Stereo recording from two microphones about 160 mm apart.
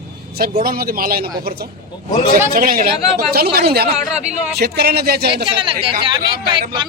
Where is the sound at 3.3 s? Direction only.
75° right (ahead or behind).